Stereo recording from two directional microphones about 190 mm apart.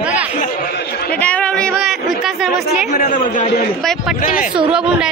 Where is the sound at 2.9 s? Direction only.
40° left (ahead or behind).